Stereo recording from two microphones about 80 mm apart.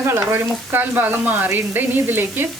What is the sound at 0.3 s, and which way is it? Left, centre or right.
Frying, right.